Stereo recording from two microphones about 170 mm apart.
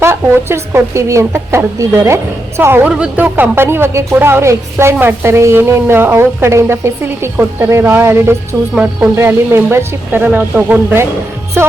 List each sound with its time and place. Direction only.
0.0 s speech: 15° right (ahead or behind)